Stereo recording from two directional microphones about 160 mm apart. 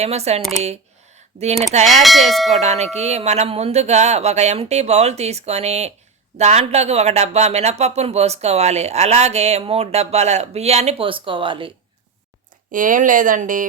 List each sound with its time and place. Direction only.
0.0 s speech: 40° right (ahead or behind)
1.7 s speech: 45° right (ahead or behind)
2.0 s bell: centre (ahead or behind)
2.6 s speech: 45° right (ahead or behind)
12.7 s speech: 55° right (ahead or behind)